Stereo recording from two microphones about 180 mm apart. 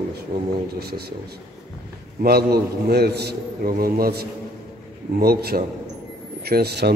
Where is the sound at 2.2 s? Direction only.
60° right (ahead or behind).